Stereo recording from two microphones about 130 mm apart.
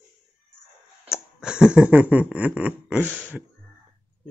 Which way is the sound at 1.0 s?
5° right (ahead or behind).